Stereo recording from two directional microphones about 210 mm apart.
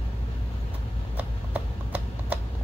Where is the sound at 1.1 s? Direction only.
5° right (ahead or behind).